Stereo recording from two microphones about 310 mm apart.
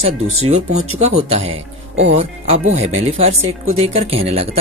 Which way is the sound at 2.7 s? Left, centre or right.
Right.